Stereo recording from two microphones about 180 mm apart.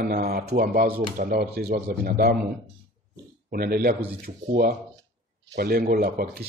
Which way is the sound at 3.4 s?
55° right (ahead or behind).